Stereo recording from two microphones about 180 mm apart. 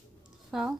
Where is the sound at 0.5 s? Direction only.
Centre (ahead or behind).